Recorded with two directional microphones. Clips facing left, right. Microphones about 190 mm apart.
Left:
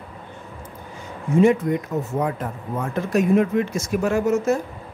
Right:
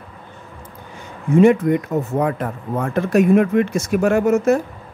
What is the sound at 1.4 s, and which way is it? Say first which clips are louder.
Speech: right 4 dB; 60° right (ahead or behind).